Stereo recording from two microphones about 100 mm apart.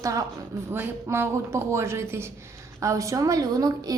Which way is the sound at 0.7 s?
25° right (ahead or behind).